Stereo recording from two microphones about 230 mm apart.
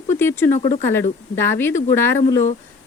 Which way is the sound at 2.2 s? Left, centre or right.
Left.